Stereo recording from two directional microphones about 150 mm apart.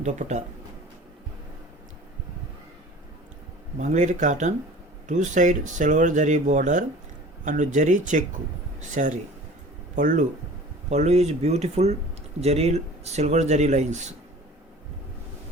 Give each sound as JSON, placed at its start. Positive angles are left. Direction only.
{"t": 0.0, "sound": "speech", "side_deg": -50}
{"t": 3.8, "sound": "speech", "side_deg": -55}
{"t": 10.8, "sound": "speech", "side_deg": -45}